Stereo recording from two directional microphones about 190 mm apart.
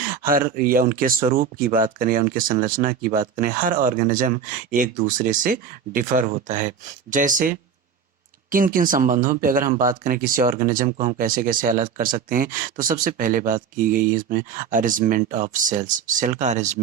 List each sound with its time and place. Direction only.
0.0 s speech: 50° right (ahead or behind)